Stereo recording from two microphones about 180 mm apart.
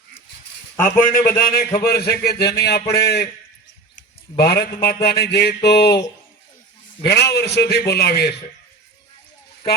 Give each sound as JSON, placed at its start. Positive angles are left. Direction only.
{"t": 0.9, "sound": "a man's voice", "side_deg": 50}
{"t": 4.4, "sound": "a man's voice", "side_deg": 65}
{"t": 7.0, "sound": "a man's voice", "side_deg": 65}